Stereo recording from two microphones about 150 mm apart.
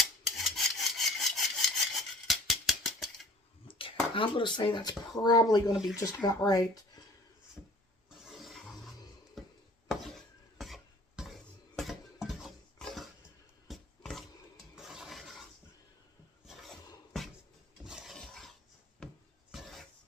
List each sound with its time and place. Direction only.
0.0 s rub: centre (ahead or behind)
2.0 s scissors: centre (ahead or behind)
3.7 s speech: 35° left (ahead or behind)
5.7 s speech: 5° right (ahead or behind)
6.0 s speech: 20° left (ahead or behind)
8.2 s toilet flush: centre (ahead or behind)
9.4 s a sound: centre (ahead or behind)
11.8 s cutlery: centre (ahead or behind)
13.7 s a sound: centre (ahead or behind)
16.5 s a sound: centre (ahead or behind)